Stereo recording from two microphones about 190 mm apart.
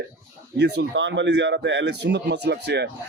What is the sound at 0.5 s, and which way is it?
Speech, 60° right (ahead or behind).